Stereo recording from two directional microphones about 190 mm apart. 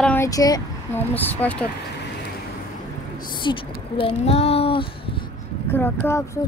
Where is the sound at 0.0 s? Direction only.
10° left (ahead or behind).